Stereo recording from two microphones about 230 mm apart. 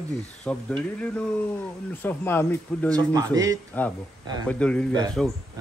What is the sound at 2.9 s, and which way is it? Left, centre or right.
Speech, centre.